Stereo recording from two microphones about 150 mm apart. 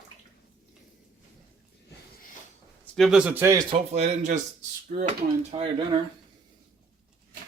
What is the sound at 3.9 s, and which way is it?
Speech, 50° right (ahead or behind).